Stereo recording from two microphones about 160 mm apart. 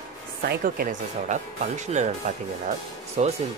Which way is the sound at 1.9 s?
45° right (ahead or behind).